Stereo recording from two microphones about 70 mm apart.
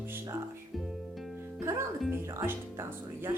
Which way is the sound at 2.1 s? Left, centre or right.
Right.